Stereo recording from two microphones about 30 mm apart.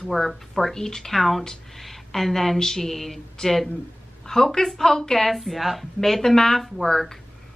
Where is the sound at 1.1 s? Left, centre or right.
Centre.